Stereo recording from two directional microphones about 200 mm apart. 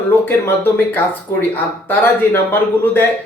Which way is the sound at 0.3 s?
10° left (ahead or behind).